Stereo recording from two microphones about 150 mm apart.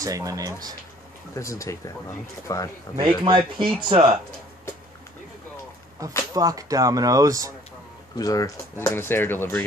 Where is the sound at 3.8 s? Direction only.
35° right (ahead or behind).